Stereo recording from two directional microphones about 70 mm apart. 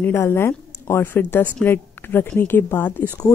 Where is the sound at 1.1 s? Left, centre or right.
Left.